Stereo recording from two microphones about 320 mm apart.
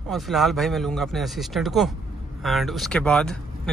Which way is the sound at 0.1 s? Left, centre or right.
Centre.